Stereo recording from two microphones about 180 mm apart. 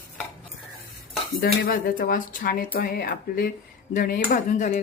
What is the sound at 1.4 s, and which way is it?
Speech, 55° left (ahead or behind).